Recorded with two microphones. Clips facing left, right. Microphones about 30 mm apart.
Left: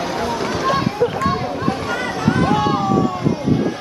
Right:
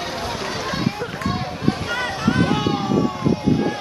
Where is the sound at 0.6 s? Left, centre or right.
Centre.